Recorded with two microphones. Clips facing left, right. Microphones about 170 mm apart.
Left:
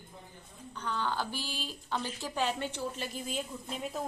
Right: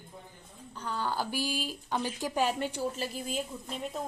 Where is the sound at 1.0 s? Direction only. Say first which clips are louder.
Right 4 dB; 10° right (ahead or behind).